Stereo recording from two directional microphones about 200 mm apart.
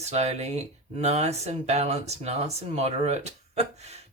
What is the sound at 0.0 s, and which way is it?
Speech, 35° right (ahead or behind).